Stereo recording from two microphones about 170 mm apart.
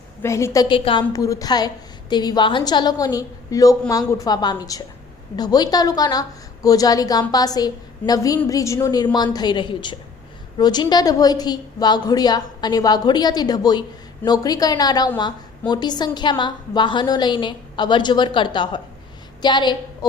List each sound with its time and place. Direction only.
0.2 s a woman's voice: 15° left (ahead or behind)